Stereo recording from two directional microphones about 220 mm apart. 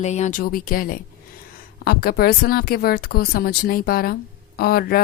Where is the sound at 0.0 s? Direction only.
30° left (ahead or behind).